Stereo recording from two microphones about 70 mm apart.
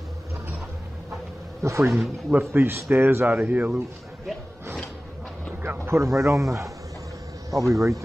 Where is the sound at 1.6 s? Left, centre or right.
Right.